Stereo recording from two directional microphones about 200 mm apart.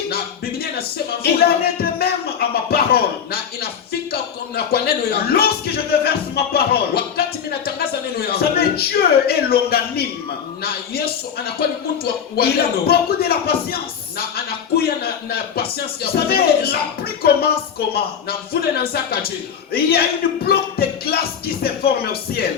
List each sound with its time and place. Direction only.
0.6 s music: 50° left (ahead or behind)
4.1 s speech: 50° left (ahead or behind)
19.7 s speech: 50° left (ahead or behind)